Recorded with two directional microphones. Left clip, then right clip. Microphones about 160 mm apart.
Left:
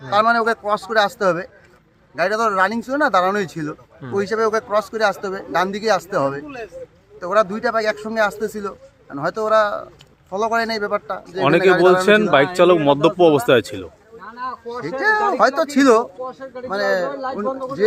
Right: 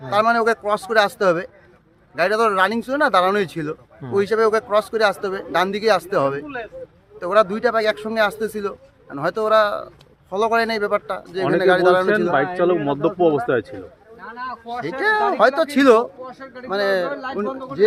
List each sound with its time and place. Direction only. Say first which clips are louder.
0.1 s speech: left 1 dB; centre (ahead or behind)
11.4 s a man's voice: left 2 dB; 90° left
14.2 s a sound: left 2 dB; 40° left (ahead or behind)
14.8 s speech: left 1 dB; 5° right (ahead or behind)
16.2 s speech: left 5 dB; 45° left (ahead or behind)
16.6 s speech: even; 5° right (ahead or behind)
17.1 s speech: left 2 dB; 45° left (ahead or behind)
17.4 s speech: left 3 dB; 35° left (ahead or behind)